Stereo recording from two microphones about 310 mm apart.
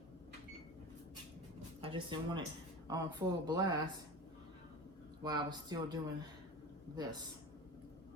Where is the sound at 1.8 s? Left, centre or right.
Centre.